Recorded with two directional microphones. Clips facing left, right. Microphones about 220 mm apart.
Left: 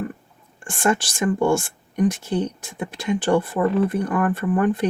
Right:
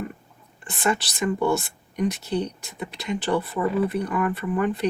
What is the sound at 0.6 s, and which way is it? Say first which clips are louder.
Speech: left 4 dB; 50° left (ahead or behind).